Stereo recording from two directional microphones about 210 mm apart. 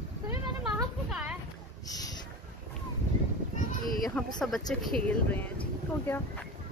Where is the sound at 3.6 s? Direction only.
40° left (ahead or behind).